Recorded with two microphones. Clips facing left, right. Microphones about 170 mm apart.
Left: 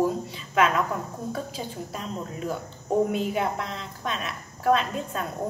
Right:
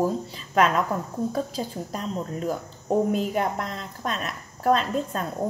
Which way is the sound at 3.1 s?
40° right (ahead or behind).